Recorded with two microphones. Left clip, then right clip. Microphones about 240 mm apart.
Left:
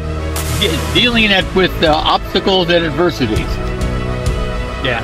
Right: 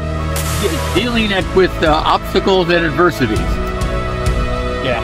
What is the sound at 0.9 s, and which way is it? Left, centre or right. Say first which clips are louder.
Speech: left 7 dB; left.